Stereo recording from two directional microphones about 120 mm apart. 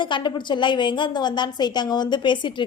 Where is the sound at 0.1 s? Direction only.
40° left (ahead or behind).